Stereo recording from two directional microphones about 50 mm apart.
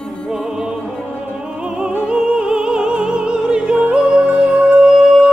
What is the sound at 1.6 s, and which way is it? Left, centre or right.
Opera, centre.